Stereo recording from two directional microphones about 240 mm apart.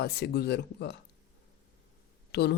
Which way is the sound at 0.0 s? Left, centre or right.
Left.